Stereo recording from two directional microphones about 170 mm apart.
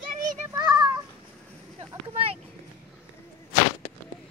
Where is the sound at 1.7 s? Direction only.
35° right (ahead or behind).